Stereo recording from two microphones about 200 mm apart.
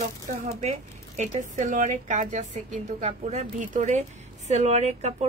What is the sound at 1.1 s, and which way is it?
Speech, 35° right (ahead or behind).